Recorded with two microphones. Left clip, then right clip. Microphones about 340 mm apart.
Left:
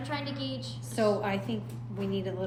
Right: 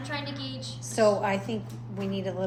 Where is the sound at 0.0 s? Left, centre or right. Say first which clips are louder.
Even; centre.